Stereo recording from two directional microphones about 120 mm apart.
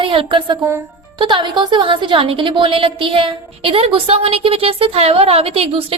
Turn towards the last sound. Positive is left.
turn(degrees=-55)  # may be behind; listen again after turning